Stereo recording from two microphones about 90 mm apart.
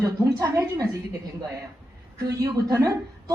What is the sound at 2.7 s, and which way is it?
Speech, 45° right (ahead or behind).